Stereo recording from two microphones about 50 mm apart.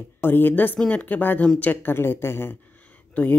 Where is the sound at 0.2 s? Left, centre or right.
Left.